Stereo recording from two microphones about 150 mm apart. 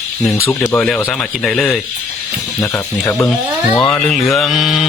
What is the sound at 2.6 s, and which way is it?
Speech, 15° left (ahead or behind).